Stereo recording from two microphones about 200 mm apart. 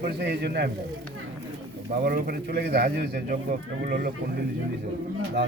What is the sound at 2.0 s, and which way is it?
Speech, 50° right (ahead or behind).